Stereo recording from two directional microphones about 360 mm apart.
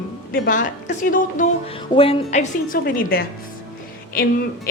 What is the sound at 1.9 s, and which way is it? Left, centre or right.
A woman's voice, centre.